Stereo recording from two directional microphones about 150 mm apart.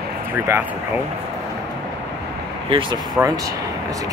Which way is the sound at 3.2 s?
20° right (ahead or behind).